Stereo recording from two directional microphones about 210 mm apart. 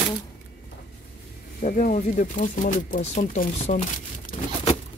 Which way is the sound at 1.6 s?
40° left (ahead or behind).